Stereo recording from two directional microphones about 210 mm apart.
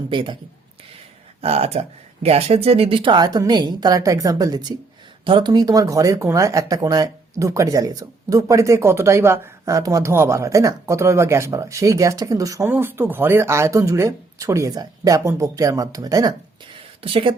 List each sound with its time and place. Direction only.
0.1 s speech: 25° right (ahead or behind)
1.4 s speech: 30° right (ahead or behind)